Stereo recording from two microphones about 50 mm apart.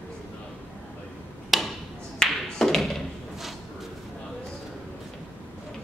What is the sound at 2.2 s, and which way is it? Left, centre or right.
Tap, centre.